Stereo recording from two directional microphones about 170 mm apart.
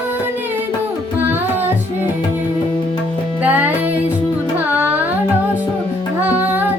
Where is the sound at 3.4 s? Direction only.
10° right (ahead or behind).